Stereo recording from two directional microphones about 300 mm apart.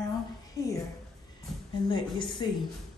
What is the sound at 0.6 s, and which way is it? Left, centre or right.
Speech, centre.